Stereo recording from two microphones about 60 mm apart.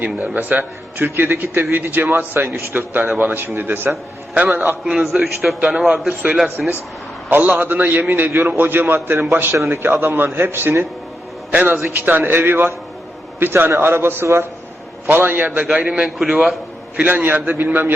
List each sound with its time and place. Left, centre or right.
0.3 s a man's voice: right
4.9 s a man's voice: centre
7.3 s a man's voice: right
11.5 s a man's voice: right
15.9 s a man's voice: centre
16.1 s a man's voice: centre
17.1 s a man's voice: right